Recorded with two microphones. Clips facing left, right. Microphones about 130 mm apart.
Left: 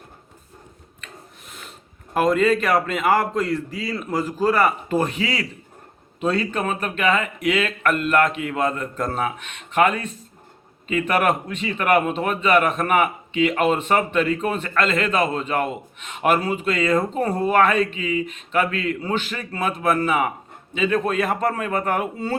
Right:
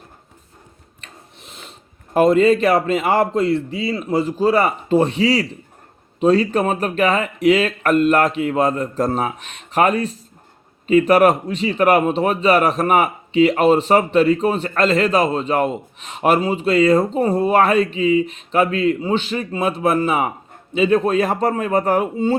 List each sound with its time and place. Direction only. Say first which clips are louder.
2.1 s a man's voice: right 5 dB; 30° right (ahead or behind)